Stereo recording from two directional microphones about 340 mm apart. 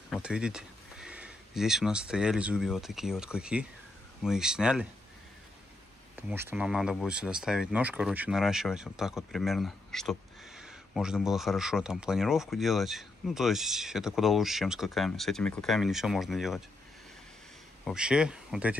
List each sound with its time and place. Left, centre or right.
0.1 s speech: centre
6.1 s speech: centre
17.8 s speech: centre